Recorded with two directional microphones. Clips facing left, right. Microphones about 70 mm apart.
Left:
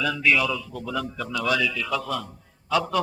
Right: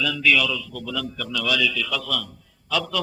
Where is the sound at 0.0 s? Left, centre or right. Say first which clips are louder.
Right 1 dB; left.